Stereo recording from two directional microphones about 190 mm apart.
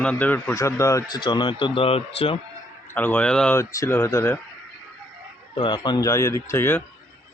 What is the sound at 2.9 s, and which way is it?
Speech, 10° left (ahead or behind).